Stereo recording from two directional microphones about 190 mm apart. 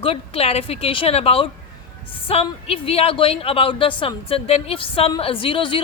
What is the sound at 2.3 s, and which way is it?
A woman's voice, 30° left (ahead or behind).